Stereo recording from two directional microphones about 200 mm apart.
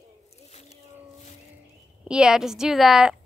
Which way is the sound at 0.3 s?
30° left (ahead or behind).